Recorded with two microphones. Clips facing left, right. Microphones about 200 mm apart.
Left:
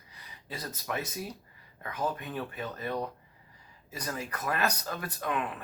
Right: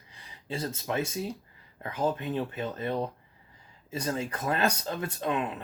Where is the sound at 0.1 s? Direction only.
30° right (ahead or behind).